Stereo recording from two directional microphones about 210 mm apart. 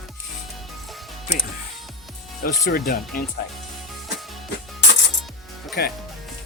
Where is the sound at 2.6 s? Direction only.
40° left (ahead or behind).